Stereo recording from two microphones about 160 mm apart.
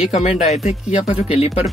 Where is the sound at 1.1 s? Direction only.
5° right (ahead or behind).